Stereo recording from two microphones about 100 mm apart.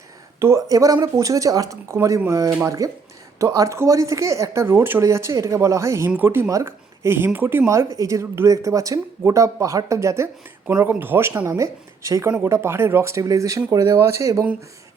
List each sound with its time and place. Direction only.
0.3 s speech: 30° right (ahead or behind)
10.7 s speech: 20° right (ahead or behind)